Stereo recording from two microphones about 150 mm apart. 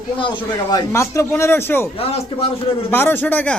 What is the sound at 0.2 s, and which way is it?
Speech, 30° left (ahead or behind).